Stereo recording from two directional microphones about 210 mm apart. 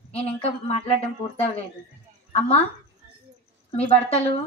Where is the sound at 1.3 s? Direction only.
30° left (ahead or behind).